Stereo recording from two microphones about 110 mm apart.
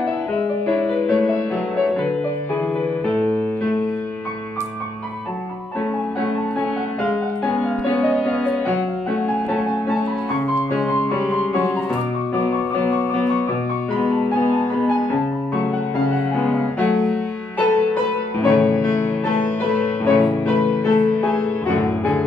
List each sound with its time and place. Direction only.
0.7 s music: 5° left (ahead or behind)
3.1 s music: 15° left (ahead or behind)
7.1 s music: 10° left (ahead or behind)
15.6 s music: 15° left (ahead or behind)
18.4 s music: 15° left (ahead or behind)